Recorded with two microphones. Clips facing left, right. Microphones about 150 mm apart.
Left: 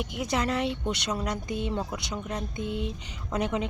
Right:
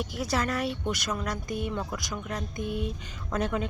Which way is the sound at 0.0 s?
20° left (ahead or behind).